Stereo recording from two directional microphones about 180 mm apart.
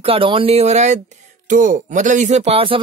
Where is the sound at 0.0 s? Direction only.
30° right (ahead or behind).